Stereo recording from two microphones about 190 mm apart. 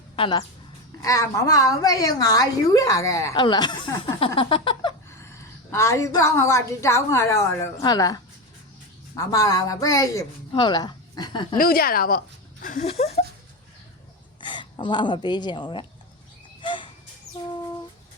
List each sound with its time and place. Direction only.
0.2 s a woman's voice: 20° left (ahead or behind)
5.0 s a woman's voice: 15° left (ahead or behind)
11.5 s speech: 50° left (ahead or behind)
12.6 s a sound: 45° left (ahead or behind)
12.9 s a sound: 35° left (ahead or behind)
14.4 s speech: 25° left (ahead or behind)
16.6 s bird: 25° left (ahead or behind)